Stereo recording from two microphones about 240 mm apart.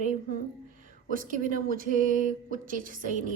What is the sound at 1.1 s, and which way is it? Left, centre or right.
Speech, right.